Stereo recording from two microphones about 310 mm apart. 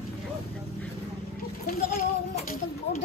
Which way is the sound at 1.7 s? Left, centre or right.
Left.